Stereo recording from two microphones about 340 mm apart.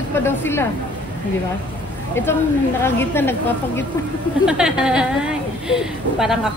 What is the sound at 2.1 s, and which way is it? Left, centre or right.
A woman's voice, centre.